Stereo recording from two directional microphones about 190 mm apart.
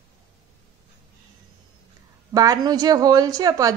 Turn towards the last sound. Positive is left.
turn(degrees=-20)  # may be behind; listen again after turning